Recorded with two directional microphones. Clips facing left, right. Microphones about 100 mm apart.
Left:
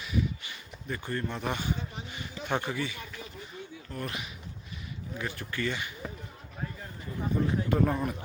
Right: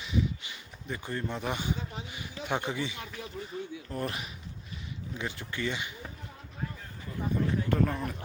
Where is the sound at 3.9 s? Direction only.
30° right (ahead or behind).